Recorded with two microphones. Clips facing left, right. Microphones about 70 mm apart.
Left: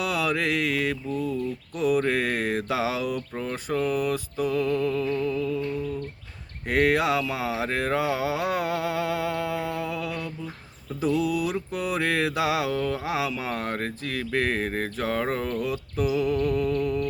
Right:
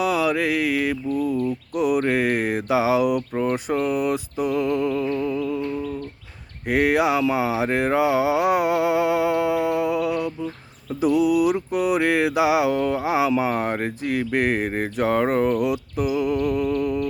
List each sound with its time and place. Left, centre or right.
0.0 s mantra: centre
6.7 s mantra: centre